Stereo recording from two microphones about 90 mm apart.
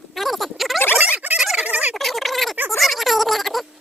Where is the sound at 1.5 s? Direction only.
15° right (ahead or behind).